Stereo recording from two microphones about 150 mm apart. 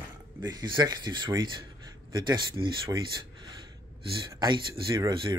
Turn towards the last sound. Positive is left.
turn(degrees=-35)  # may be behind; listen again after turning